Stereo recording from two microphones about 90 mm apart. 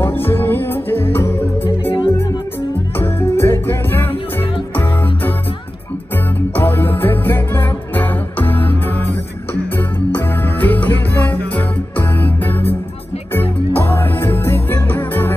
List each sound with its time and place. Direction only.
0.0 s music: 25° left (ahead or behind)
3.0 s music: 25° left (ahead or behind)
6.5 s music: 20° left (ahead or behind)